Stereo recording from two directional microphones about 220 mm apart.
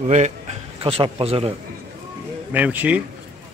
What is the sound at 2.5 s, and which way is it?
Speech, 5° right (ahead or behind).